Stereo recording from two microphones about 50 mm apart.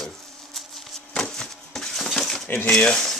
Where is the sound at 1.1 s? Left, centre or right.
Centre.